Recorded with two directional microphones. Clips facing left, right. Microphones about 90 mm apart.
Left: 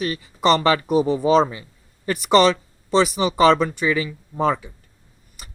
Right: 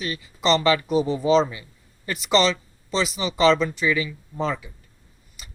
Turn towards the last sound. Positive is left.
turn(degrees=50)  # may be behind; listen again after turning